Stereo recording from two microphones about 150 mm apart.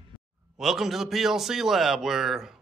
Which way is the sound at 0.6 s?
Centre (ahead or behind).